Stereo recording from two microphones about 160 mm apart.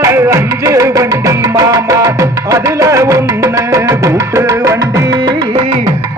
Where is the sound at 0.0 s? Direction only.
15° right (ahead or behind).